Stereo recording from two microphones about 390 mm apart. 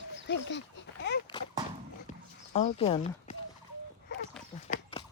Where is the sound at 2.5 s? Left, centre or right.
Centre.